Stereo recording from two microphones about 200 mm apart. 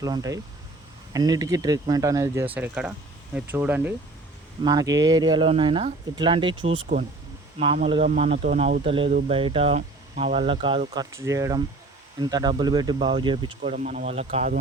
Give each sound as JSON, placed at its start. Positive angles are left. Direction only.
{"t": 0.0, "sound": "speech", "side_deg": -15}
{"t": 4.6, "sound": "speech", "side_deg": -20}
{"t": 13.7, "sound": "speech", "side_deg": -40}